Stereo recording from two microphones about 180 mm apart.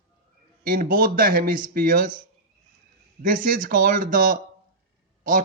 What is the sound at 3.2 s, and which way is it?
Speech, 50° right (ahead or behind).